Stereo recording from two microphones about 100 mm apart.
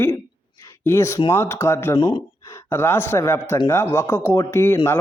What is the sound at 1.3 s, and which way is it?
Speech, 25° left (ahead or behind).